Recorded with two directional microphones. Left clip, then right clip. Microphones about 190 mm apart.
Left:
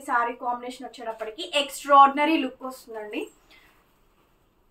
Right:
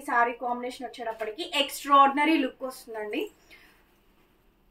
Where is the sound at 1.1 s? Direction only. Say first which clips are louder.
Left 2 dB; 15° left (ahead or behind).